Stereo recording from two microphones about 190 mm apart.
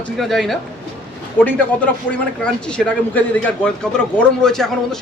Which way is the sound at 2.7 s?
5° left (ahead or behind).